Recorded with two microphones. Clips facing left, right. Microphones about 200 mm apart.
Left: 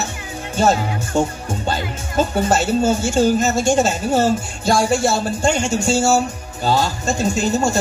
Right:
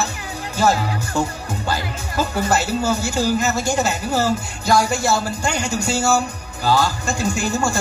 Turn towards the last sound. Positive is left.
turn(degrees=20)  # may be behind; listen again after turning